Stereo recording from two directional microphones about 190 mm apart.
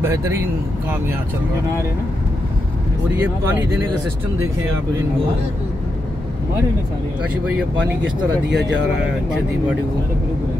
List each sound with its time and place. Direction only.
0.0 s speech: 15° right (ahead or behind)
3.2 s speech: 10° right (ahead or behind)
7.7 s speech: 70° right (ahead or behind)